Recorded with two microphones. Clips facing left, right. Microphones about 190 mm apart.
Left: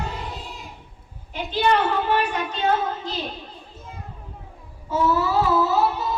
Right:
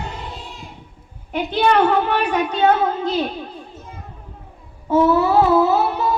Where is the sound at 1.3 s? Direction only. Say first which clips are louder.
Right 4 dB; 65° right (ahead or behind).